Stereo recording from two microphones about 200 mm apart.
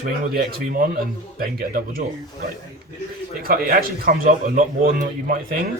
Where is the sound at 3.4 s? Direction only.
45° right (ahead or behind).